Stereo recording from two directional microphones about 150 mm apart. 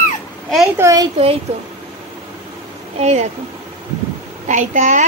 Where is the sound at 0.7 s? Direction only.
20° right (ahead or behind).